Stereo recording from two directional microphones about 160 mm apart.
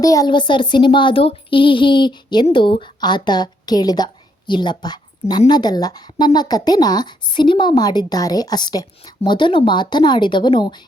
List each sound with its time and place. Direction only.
0.0 s speech: 20° left (ahead or behind)